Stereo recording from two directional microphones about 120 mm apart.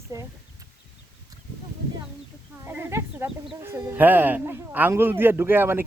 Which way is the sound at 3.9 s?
15° right (ahead or behind).